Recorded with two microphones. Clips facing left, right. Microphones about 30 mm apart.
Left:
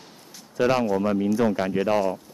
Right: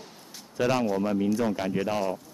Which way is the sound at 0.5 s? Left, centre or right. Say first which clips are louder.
Left 4 dB; centre.